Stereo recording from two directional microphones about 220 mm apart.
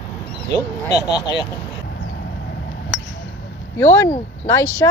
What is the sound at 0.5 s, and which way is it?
Speech, 15° left (ahead or behind).